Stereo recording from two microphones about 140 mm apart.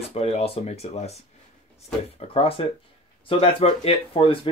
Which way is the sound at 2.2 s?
50° left (ahead or behind).